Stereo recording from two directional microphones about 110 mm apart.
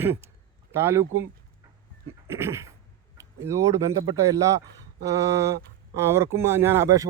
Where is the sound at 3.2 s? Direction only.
30° right (ahead or behind).